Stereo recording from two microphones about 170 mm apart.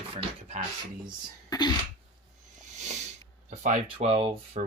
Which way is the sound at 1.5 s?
25° left (ahead or behind).